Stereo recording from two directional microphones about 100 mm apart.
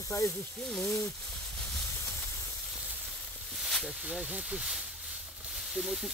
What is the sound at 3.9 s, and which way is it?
Speech, 10° right (ahead or behind).